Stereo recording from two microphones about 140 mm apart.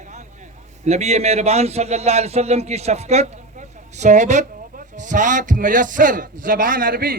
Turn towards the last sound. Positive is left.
turn(degrees=-90)